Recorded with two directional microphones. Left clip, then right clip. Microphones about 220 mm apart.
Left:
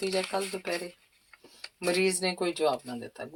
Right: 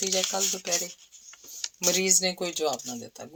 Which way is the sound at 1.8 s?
40° right (ahead or behind).